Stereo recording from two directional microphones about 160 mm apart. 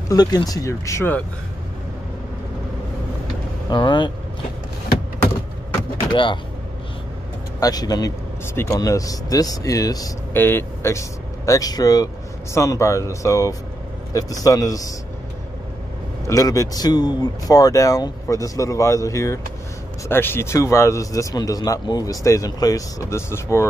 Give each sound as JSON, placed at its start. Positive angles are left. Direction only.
{"t": 0.1, "sound": "speech", "side_deg": 25}
{"t": 3.7, "sound": "speech", "side_deg": 30}
{"t": 6.1, "sound": "speech", "side_deg": 30}
{"t": 7.6, "sound": "speech", "side_deg": 25}
{"t": 16.3, "sound": "speech", "side_deg": 20}